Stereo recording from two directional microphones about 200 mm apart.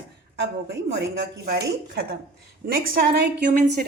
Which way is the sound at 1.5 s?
50° right (ahead or behind).